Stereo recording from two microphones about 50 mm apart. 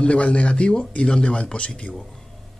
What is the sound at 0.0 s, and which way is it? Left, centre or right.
Speech, left.